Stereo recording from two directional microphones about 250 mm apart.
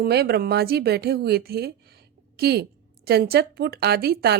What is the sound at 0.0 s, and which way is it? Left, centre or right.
Speech, right.